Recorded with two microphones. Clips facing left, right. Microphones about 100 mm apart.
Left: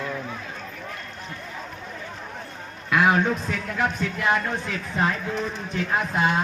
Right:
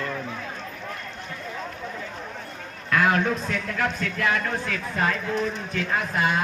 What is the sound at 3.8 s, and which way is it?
Speech, 20° left (ahead or behind).